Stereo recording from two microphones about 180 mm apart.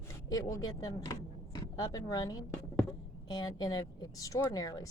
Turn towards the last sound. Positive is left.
turn(degrees=20)  # may be behind; listen again after turning